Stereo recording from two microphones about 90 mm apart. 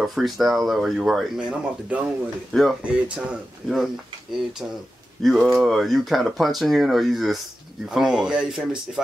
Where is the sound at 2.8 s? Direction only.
15° right (ahead or behind).